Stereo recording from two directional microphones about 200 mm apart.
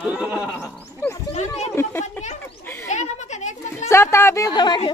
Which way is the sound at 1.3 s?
35° left (ahead or behind).